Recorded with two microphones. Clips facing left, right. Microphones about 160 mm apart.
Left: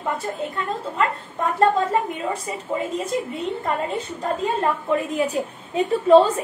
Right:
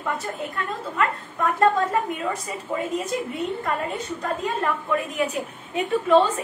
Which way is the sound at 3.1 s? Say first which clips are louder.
Left 1 dB; 30° left (ahead or behind).